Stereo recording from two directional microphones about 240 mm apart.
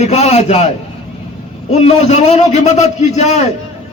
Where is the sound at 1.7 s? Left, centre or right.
Left.